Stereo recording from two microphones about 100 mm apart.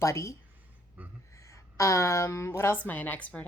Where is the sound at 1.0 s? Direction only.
15° right (ahead or behind).